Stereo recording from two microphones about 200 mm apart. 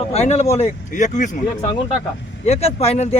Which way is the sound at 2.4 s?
30° left (ahead or behind).